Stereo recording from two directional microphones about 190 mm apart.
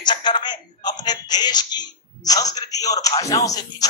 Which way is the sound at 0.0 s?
25° left (ahead or behind).